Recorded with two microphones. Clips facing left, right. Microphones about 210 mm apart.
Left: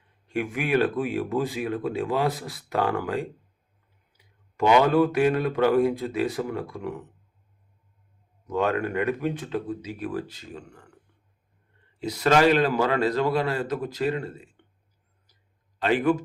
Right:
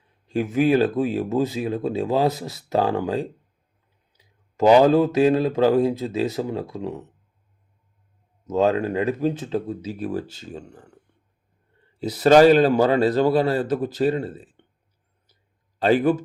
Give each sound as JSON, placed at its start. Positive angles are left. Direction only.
{"t": 0.3, "sound": "speech", "side_deg": -30}
{"t": 4.6, "sound": "speech", "side_deg": -35}
{"t": 8.4, "sound": "speech", "side_deg": -25}
{"t": 11.9, "sound": "speech", "side_deg": -35}
{"t": 15.8, "sound": "speech", "side_deg": -35}